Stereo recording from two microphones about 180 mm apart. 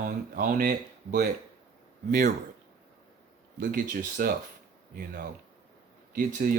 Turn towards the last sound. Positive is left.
turn(degrees=-50)  # may be behind; listen again after turning